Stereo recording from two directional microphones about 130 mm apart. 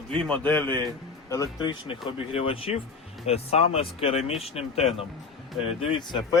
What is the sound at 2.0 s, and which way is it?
Speech, 45° left (ahead or behind).